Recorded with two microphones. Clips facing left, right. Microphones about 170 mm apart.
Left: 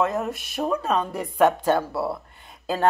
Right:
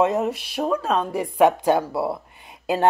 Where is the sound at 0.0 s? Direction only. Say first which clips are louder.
Right 4 dB; 20° right (ahead or behind).